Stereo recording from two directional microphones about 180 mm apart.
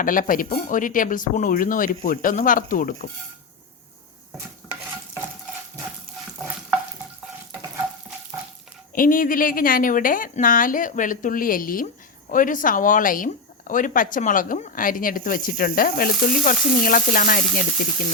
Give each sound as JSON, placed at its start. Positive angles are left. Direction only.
{"t": 0.0, "sound": "speech", "side_deg": 50}
{"t": 9.0, "sound": "speech", "side_deg": 50}